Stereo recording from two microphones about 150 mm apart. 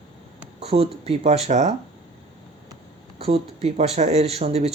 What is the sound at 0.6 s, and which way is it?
Speech, 40° right (ahead or behind).